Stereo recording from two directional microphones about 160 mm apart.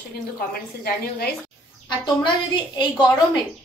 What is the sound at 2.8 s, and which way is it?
Speech, 30° left (ahead or behind).